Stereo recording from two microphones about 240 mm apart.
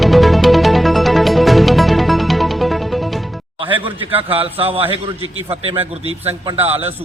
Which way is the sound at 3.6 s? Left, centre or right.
Right.